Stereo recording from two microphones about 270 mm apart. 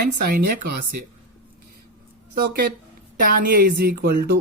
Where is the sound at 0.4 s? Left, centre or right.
Right.